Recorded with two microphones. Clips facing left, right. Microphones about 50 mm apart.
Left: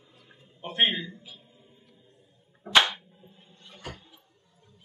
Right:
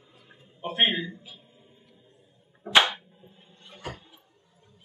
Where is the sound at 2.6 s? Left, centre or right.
Centre.